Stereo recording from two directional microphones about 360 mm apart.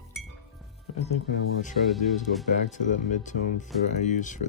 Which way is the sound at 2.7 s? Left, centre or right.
Left.